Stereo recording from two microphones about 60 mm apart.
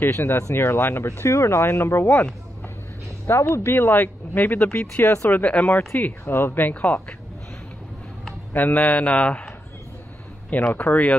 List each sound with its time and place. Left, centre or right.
0.0 s speech: left
0.6 s speech: left
3.5 s speech: left
5.0 s speech: left
5.3 s a man's voice: left
6.7 s a man's voice: left
8.5 s a man's voice: left
10.7 s a man's voice: left